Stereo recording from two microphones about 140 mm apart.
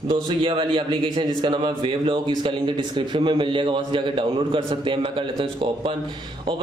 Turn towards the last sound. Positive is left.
turn(degrees=-40)  # may be behind; listen again after turning